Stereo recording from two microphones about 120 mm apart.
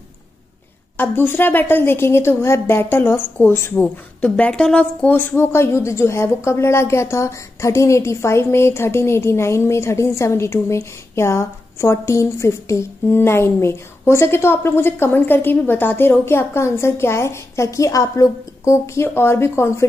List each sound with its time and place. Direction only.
0.9 s a woman's voice: 20° left (ahead or behind)